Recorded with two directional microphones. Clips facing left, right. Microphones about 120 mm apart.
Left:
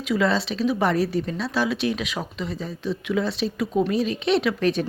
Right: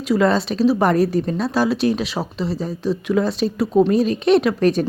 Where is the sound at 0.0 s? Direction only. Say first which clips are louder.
Right 5 dB; 40° right (ahead or behind).